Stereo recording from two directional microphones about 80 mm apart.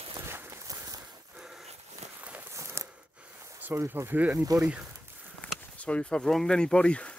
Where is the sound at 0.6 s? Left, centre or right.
Right.